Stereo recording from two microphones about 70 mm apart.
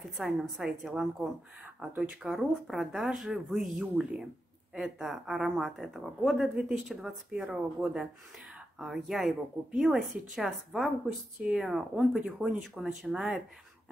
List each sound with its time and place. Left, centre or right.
0.0 s a woman's voice: centre
7.4 s a woman's voice: centre